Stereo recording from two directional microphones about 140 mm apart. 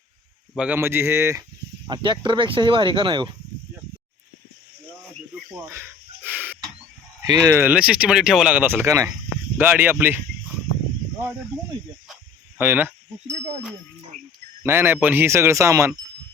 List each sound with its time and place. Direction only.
0.5 s speech: 5° right (ahead or behind)
0.8 s speech: 15° right (ahead or behind)
1.9 s speech: 35° right (ahead or behind)
5.5 s a sound: 15° right (ahead or behind)
7.3 s speech: 25° right (ahead or behind)
12.5 s speech: 15° right (ahead or behind)
14.6 s speech: 15° right (ahead or behind)